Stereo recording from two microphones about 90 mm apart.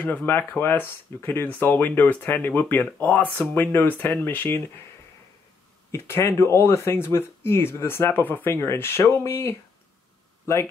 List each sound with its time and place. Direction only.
0.0 s speech: 20° left (ahead or behind)
5.9 s speech: 30° left (ahead or behind)